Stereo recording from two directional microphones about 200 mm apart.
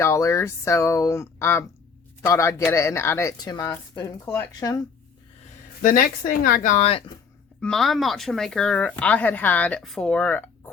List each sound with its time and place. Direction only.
0.0 s a woman's voice: 15° left (ahead or behind)
5.8 s speech: 45° left (ahead or behind)
7.6 s speech: centre (ahead or behind)